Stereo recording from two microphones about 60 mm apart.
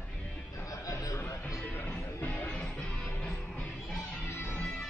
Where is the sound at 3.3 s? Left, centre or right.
Left.